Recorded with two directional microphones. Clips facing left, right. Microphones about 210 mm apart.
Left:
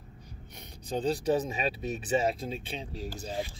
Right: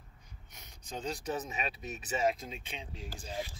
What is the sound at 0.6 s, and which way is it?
Speech, 35° left (ahead or behind).